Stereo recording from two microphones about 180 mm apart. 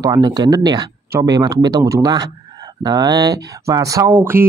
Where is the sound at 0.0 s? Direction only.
25° right (ahead or behind).